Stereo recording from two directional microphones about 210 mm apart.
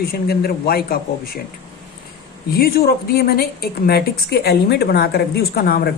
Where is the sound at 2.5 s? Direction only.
45° left (ahead or behind).